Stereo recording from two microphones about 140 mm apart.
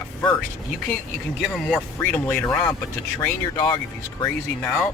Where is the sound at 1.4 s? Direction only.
Centre (ahead or behind).